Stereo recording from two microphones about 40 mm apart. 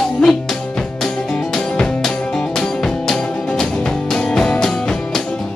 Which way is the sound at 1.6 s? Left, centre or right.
Left.